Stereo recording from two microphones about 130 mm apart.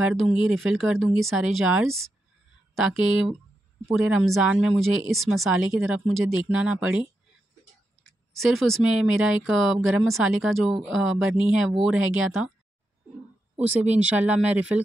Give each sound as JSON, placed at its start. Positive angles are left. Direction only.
{"t": 0.0, "sound": "speech", "side_deg": -5}
{"t": 8.0, "sound": "speech", "side_deg": 0}
{"t": 13.6, "sound": "speech", "side_deg": -10}